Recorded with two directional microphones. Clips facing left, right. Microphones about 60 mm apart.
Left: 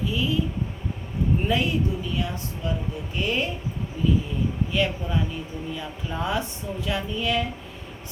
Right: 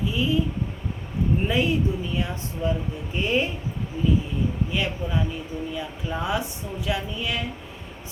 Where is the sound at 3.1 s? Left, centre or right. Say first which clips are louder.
Right 2 dB; right.